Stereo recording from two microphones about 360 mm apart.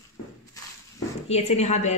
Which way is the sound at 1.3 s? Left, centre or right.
Centre.